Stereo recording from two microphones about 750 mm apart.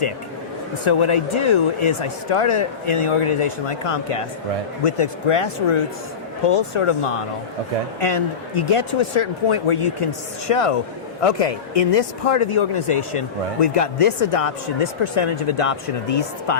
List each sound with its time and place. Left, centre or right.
0.9 s speech: left